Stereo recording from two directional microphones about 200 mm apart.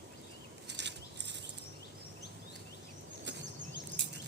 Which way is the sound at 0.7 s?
60° right (ahead or behind).